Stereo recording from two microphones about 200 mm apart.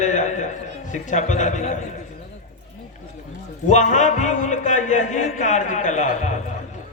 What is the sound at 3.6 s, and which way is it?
Speech, 40° left (ahead or behind).